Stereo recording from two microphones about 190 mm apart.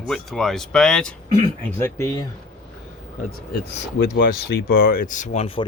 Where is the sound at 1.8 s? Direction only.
15° left (ahead or behind).